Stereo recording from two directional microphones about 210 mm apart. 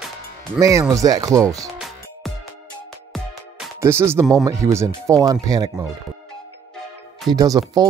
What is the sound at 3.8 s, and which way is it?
Speech, 10° right (ahead or behind).